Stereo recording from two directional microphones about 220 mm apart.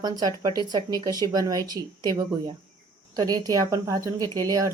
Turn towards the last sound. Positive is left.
turn(degrees=-15)  # may be behind; listen again after turning